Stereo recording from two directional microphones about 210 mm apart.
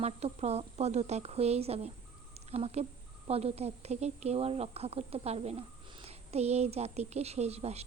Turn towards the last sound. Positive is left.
turn(degrees=-30)  # may be behind; listen again after turning